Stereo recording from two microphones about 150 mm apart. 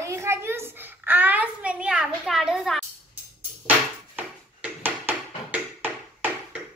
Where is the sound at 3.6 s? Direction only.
10° right (ahead or behind).